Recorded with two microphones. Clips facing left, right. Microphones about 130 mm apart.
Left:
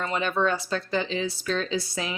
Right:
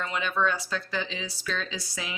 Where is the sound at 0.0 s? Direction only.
40° left (ahead or behind).